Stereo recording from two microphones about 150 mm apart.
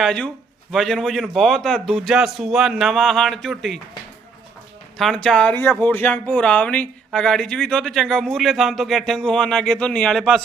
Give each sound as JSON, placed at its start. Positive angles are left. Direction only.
{"t": 0.0, "sound": "speech", "side_deg": 5}
{"t": 4.9, "sound": "speech", "side_deg": 5}